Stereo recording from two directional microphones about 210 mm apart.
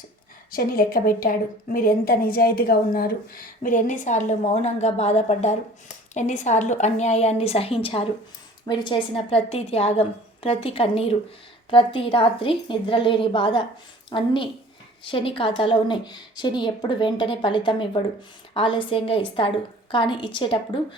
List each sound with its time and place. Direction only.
0.5 s a woman's voice: 45° left (ahead or behind); by 20.7 s 25° left (ahead or behind)